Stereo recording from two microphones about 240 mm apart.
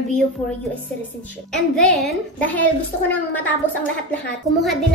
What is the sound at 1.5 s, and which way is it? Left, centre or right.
Speech, centre.